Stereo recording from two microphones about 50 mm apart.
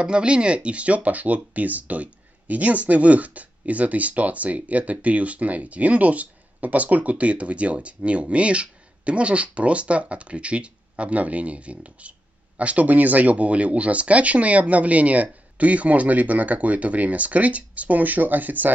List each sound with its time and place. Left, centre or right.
0.0 s speech: right